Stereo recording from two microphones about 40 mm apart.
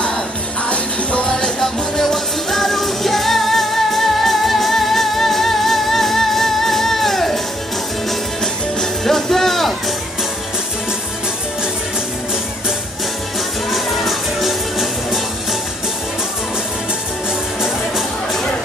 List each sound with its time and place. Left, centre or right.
0.7 s music: left
1.3 s music: centre
9.0 s music: centre
13.7 s music: centre